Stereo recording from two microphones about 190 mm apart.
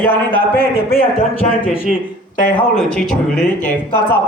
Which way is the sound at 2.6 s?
5° left (ahead or behind).